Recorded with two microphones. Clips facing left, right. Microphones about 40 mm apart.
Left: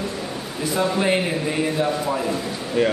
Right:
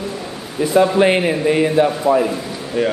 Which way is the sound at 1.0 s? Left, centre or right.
Right.